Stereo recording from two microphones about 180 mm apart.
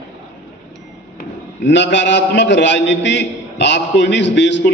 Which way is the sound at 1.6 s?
75° left (ahead or behind).